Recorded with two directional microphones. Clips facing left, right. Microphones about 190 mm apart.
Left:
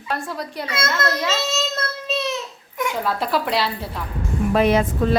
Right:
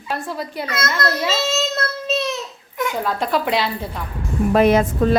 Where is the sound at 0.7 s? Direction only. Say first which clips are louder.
Even; 25° left (ahead or behind).